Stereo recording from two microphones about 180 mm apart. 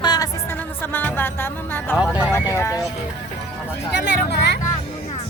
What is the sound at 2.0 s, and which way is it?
Speech, 5° right (ahead or behind).